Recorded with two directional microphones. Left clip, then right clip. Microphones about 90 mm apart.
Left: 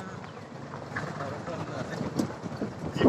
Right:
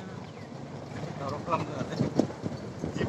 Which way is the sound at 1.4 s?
30° right (ahead or behind).